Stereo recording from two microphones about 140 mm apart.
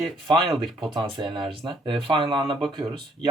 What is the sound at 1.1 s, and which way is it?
Speech, 35° right (ahead or behind).